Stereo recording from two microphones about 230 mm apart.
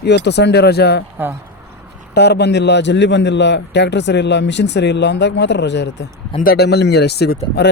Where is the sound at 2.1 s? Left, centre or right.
Left.